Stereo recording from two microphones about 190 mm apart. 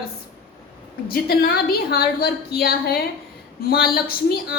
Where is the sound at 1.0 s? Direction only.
55° left (ahead or behind).